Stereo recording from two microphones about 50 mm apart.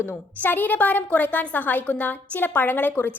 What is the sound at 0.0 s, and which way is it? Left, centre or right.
A woman's voice, left.